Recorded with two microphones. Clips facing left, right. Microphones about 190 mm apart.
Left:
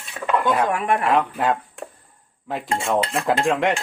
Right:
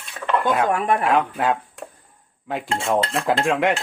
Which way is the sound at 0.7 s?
35° right (ahead or behind).